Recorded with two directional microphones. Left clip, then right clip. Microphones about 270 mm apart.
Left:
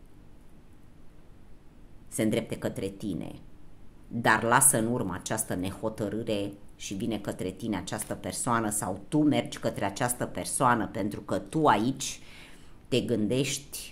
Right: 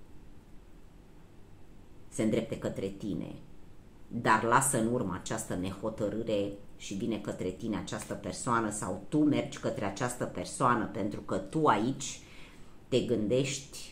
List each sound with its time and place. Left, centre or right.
2.1 s speech: left